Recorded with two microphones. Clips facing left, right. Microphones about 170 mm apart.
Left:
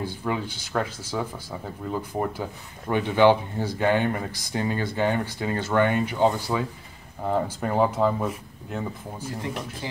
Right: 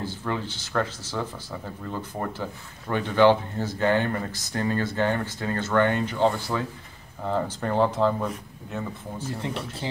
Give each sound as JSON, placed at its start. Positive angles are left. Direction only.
{"t": 0.0, "sound": "speech", "side_deg": 10}
{"t": 9.4, "sound": "speech", "side_deg": -25}